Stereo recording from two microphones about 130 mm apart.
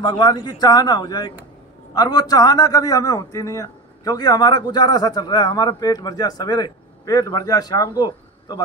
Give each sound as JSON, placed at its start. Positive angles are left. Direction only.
{"t": 0.0, "sound": "a man's voice", "side_deg": 35}